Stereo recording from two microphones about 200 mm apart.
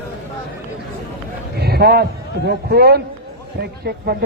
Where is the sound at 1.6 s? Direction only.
50° right (ahead or behind).